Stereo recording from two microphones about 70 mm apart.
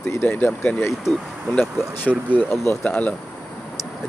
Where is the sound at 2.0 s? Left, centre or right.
Left.